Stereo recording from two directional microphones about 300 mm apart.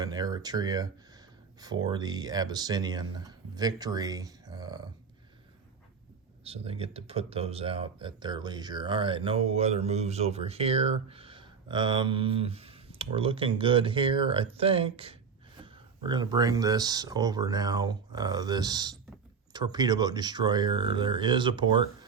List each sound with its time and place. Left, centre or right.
0.0 s speech: centre
6.4 s speech: centre